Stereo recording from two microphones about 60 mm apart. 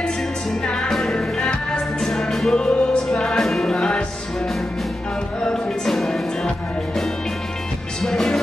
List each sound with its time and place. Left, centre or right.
0.7 s music: centre
2.5 s music: centre
3.7 s music: centre
5.9 s music: centre
8.0 s music: centre